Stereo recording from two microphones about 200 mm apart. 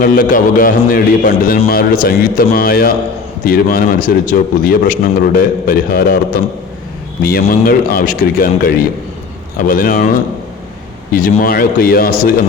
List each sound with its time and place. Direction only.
0.0 s a man's voice: 45° left (ahead or behind)
7.3 s a man's voice: 50° left (ahead or behind)
11.1 s a man's voice: 45° left (ahead or behind)